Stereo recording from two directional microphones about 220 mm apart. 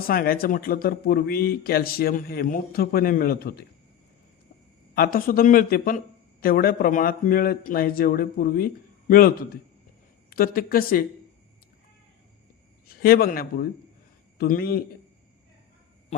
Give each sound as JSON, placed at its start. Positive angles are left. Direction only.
{"t": 0.1, "sound": "speech", "side_deg": 40}
{"t": 4.9, "sound": "a man's voice", "side_deg": 40}
{"t": 12.9, "sound": "a man's voice", "side_deg": 45}